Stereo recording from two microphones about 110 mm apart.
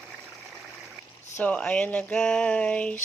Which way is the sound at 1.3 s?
10° left (ahead or behind).